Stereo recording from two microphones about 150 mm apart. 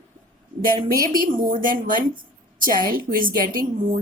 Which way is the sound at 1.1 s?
70° right (ahead or behind).